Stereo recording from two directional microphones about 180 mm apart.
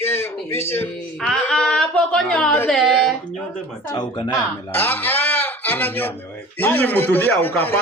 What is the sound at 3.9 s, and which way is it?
Speech, 25° left (ahead or behind).